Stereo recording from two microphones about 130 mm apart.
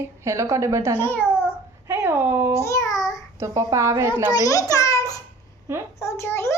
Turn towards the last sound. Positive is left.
turn(degrees=20)  # may be behind; listen again after turning